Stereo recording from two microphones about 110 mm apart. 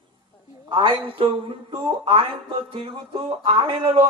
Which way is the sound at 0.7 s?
50° right (ahead or behind).